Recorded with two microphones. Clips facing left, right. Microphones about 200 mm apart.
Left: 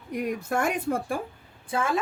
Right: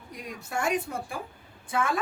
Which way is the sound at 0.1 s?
60° left (ahead or behind).